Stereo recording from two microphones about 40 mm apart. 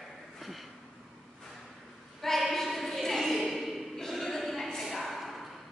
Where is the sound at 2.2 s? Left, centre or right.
Centre.